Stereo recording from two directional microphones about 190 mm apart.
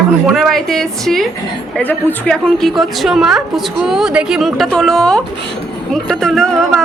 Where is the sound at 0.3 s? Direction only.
Centre (ahead or behind).